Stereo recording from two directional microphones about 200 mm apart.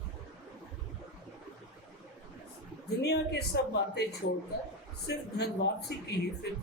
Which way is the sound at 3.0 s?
55° left (ahead or behind).